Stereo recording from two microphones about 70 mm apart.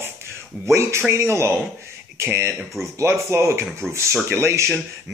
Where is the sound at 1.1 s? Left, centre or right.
Right.